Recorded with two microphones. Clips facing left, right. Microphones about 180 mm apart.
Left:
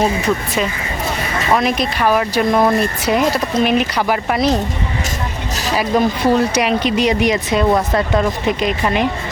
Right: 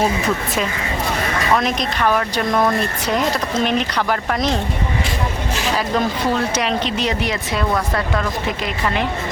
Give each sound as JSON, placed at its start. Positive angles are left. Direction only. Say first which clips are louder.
{"t": 1.5, "sound": "speech", "louder": "left 6 dB", "side_deg": 5}
{"t": 5.7, "sound": "speech", "louder": "left 6 dB", "side_deg": 10}